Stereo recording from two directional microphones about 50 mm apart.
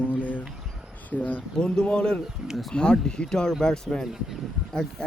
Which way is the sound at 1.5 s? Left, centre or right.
Centre.